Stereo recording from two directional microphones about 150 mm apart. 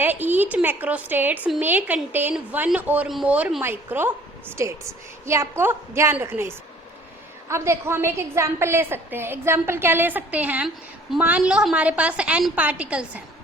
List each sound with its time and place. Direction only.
0.0 s a woman's voice: 10° right (ahead or behind)